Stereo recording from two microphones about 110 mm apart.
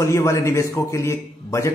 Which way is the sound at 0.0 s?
25° left (ahead or behind).